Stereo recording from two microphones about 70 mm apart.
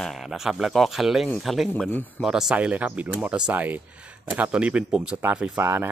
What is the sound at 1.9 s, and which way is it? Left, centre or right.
Speech, left.